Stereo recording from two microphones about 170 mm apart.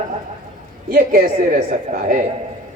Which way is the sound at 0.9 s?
60° right (ahead or behind).